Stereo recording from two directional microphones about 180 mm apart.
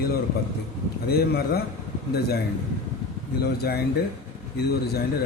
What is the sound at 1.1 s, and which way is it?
Speech, 60° left (ahead or behind).